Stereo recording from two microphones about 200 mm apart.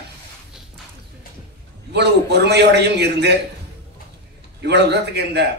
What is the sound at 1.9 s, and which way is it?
A man's voice, 55° right (ahead or behind).